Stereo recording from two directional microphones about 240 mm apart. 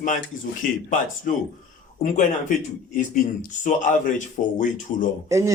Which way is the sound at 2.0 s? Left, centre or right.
Left.